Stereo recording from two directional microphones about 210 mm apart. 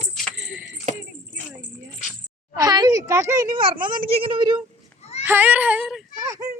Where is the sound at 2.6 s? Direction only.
20° right (ahead or behind).